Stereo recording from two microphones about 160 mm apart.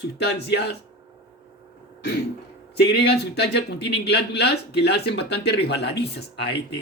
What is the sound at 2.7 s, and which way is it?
Speech, 90° left.